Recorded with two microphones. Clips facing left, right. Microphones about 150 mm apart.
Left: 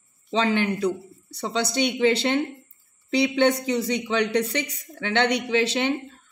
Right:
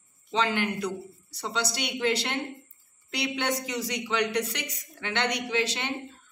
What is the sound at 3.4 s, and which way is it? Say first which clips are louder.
A woman's voice: left 8 dB; 60° left (ahead or behind).